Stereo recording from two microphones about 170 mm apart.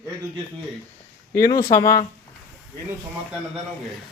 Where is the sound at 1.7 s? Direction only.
20° left (ahead or behind).